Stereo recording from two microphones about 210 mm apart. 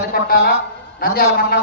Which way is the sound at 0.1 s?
45° left (ahead or behind).